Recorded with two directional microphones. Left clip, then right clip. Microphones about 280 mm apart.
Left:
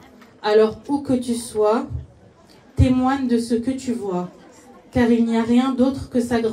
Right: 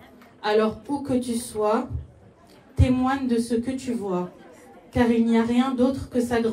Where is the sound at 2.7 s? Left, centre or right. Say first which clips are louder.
Left 4 dB; left.